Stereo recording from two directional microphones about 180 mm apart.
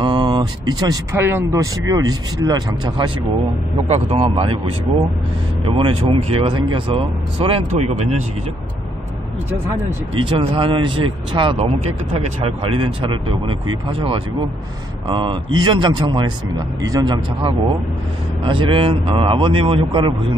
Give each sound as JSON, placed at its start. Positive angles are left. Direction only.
{"t": 0.0, "sound": "speech", "side_deg": -25}
{"t": 3.8, "sound": "a man's voice", "side_deg": -35}
{"t": 5.7, "sound": "speech", "side_deg": -30}
{"t": 10.1, "sound": "speech", "side_deg": -30}